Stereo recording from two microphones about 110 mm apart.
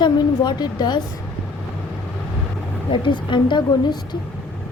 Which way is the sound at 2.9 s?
45° left (ahead or behind).